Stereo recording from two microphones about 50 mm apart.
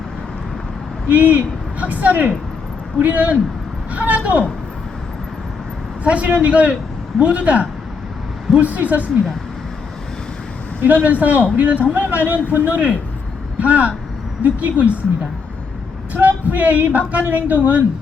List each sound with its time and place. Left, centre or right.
1.0 s a man's voice: right
6.1 s a man's voice: right
10.8 s speech: right
16.1 s speech: right